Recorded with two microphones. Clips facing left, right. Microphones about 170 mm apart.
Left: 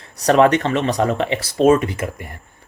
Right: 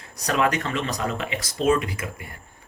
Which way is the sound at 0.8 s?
70° left (ahead or behind).